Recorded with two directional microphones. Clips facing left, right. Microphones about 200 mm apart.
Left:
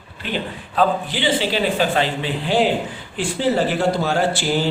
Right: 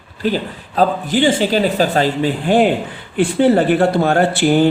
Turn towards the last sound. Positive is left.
turn(degrees=-55)  # may be behind; listen again after turning